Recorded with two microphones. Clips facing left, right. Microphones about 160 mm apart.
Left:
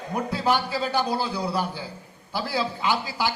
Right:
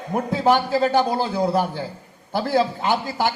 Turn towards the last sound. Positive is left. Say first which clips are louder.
# right 4 dB
turn(degrees=-50)  # may be behind; listen again after turning